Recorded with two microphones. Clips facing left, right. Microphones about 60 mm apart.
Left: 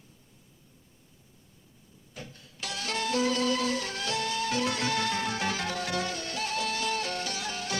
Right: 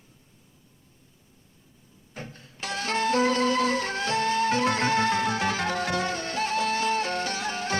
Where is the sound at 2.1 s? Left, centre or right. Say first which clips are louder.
Right 4 dB; right.